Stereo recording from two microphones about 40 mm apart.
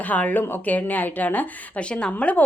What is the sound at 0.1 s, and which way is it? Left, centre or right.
A woman's voice, left.